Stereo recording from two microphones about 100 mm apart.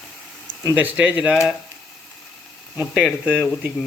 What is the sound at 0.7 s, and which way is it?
Speech, 15° right (ahead or behind).